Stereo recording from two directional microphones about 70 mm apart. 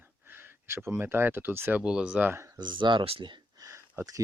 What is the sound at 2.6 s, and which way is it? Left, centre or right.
Speech, right.